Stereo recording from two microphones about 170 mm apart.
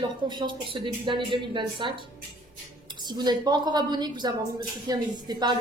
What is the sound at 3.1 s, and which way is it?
A woman's voice, 25° right (ahead or behind).